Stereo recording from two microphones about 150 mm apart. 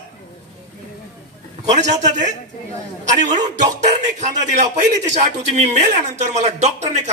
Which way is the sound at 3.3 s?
30° right (ahead or behind).